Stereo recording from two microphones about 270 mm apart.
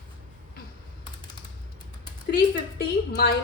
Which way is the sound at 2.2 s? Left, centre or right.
Left.